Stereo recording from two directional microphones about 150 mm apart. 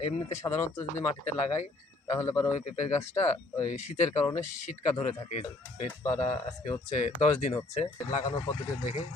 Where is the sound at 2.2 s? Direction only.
15° left (ahead or behind).